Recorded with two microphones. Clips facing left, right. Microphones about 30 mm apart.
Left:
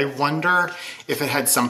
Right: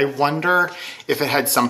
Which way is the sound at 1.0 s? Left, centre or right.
Right.